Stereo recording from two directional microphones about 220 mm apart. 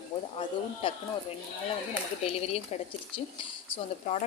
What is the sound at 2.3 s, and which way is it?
Speech, 25° left (ahead or behind).